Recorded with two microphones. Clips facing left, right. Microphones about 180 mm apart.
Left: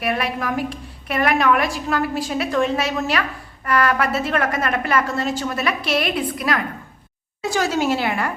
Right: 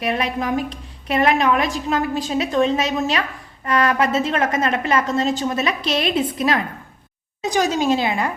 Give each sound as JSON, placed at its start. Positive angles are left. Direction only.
{"t": 0.0, "sound": "a woman's voice", "side_deg": -25}